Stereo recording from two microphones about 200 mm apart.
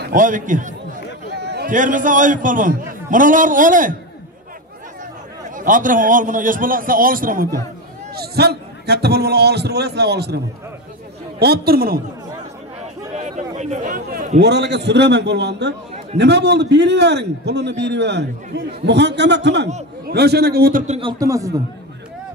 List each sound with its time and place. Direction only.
0.0 s a man's voice: 40° right (ahead or behind)
1.4 s a sound: 55° right (ahead or behind)
1.7 s a man's voice: 40° right (ahead or behind)
5.6 s a man's voice: 40° right (ahead or behind)
13.1 s a man's voice: 35° right (ahead or behind); by 21.5 s 15° right (ahead or behind)